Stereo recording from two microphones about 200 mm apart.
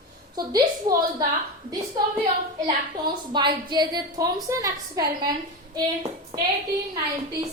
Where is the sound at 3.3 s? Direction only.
20° right (ahead or behind).